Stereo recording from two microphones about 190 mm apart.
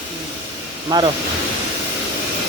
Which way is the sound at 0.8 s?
25° right (ahead or behind).